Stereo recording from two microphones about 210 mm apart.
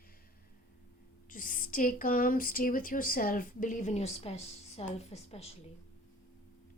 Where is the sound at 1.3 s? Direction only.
40° left (ahead or behind).